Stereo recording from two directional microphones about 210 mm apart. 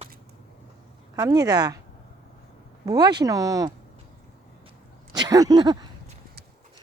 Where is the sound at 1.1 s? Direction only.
15° right (ahead or behind).